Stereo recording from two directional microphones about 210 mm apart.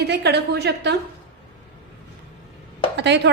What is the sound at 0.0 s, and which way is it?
Speech, 50° right (ahead or behind).